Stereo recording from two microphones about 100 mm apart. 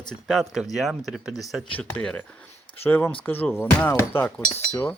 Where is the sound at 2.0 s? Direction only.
10° left (ahead or behind).